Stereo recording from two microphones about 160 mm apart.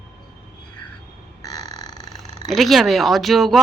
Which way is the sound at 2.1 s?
Centre (ahead or behind).